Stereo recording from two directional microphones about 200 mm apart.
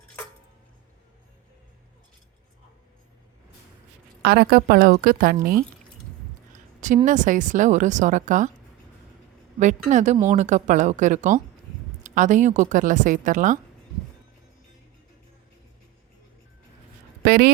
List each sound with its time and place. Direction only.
4.2 s a woman's voice: 50° right (ahead or behind)
9.6 s speech: 35° right (ahead or behind)
17.2 s speech: 50° right (ahead or behind)